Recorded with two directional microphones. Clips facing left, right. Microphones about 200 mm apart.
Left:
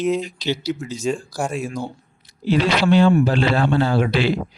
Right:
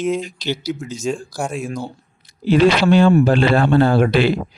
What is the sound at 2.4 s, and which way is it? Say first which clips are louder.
Speech: right 4 dB; 50° right (ahead or behind).